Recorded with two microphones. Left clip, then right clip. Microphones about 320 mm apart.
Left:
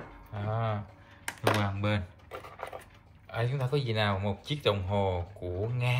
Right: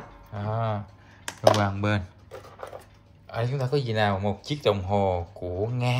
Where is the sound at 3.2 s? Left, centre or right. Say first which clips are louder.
Right 4 dB; centre.